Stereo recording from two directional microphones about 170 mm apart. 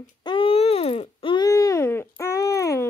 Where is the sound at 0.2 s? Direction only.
30° left (ahead or behind).